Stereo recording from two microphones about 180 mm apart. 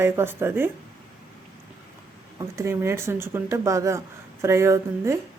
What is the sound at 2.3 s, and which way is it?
A woman's voice, 15° right (ahead or behind).